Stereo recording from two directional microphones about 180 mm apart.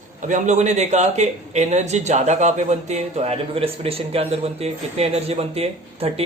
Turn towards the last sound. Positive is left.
turn(degrees=-35)  # may be behind; listen again after turning